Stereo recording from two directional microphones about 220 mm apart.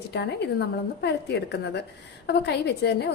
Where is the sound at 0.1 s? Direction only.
50° left (ahead or behind).